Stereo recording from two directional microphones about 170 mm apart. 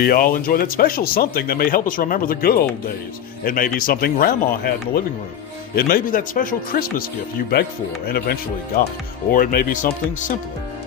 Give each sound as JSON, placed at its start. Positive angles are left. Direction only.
{"t": 0.0, "sound": "speech", "side_deg": 60}
{"t": 5.7, "sound": "speech", "side_deg": 55}